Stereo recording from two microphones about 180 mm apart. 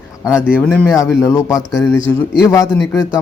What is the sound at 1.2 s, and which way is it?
Speech, 20° left (ahead or behind).